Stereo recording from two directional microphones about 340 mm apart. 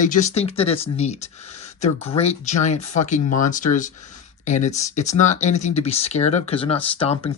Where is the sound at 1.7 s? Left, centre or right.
Centre.